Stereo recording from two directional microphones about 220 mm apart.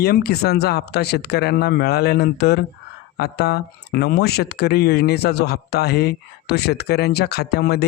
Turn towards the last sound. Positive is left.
turn(degrees=45)  # may be behind; listen again after turning